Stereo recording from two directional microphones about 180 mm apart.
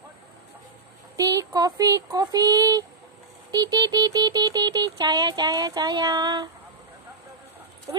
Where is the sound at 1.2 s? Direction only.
20° right (ahead or behind).